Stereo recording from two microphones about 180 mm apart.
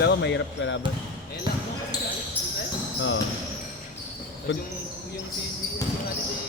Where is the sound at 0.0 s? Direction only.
75° left (ahead or behind).